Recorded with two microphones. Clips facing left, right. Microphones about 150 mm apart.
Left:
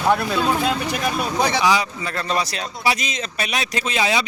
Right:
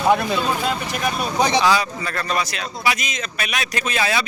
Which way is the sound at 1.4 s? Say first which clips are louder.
Right 3 dB; 15° right (ahead or behind).